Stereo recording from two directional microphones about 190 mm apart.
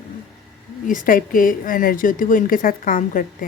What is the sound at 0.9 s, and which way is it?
A woman's voice, 45° left (ahead or behind).